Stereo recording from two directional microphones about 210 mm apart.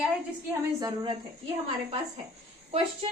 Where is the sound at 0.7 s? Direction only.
20° right (ahead or behind).